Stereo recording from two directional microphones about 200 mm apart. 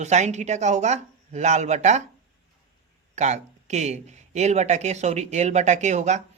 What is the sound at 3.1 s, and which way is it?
Speech, 35° right (ahead or behind).